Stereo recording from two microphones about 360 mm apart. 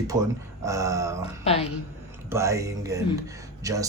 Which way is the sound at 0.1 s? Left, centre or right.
Centre.